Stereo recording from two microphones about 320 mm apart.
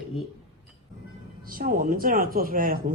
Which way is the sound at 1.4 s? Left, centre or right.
Right.